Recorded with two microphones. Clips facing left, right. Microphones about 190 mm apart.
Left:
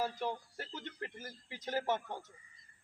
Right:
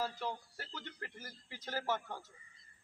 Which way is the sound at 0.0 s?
15° left (ahead or behind).